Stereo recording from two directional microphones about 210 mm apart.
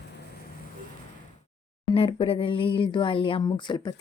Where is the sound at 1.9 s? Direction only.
25° left (ahead or behind).